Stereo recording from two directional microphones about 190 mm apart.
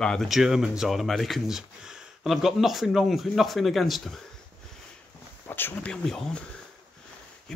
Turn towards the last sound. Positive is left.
turn(degrees=5)  # may be behind; listen again after turning